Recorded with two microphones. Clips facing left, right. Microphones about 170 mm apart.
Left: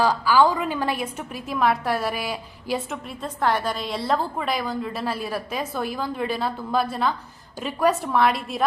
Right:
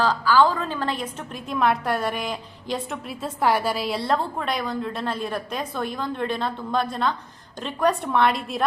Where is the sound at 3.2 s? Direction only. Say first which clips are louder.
Right 2 dB; 10° right (ahead or behind).